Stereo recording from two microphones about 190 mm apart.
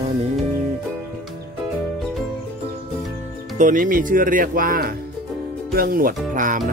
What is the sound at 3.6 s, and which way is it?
Speech, 45° right (ahead or behind).